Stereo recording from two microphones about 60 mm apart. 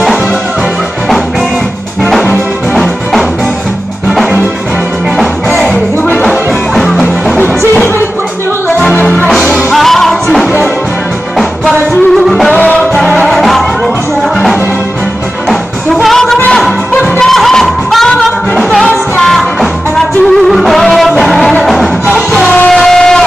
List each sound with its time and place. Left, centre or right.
2.7 s music: centre
5.7 s music: left
6.2 s music: centre
7.3 s music: left
9.7 s music: centre
12.3 s music: centre
12.5 s music: left
12.9 s music: centre
15.9 s music: centre
22.3 s music: left
22.7 s music: centre